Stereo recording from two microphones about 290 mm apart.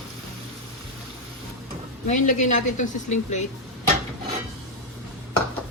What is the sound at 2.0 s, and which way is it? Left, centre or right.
A woman's voice, left.